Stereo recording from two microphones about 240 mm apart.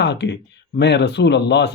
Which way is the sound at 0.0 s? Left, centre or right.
Left.